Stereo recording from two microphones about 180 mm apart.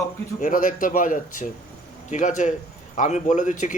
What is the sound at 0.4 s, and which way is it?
A man's voice, 45° left (ahead or behind).